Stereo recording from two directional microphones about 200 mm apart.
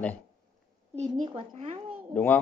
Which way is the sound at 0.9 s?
35° right (ahead or behind).